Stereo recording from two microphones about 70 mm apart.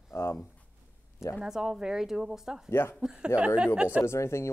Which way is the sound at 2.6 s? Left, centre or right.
Left.